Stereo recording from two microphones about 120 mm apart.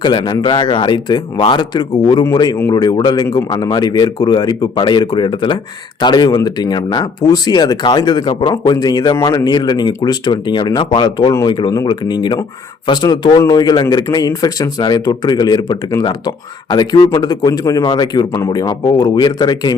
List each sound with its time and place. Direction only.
0.0 s a man's voice: 40° left (ahead or behind)